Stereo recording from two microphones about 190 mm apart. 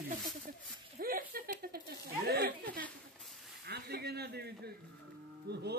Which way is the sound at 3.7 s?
55° right (ahead or behind).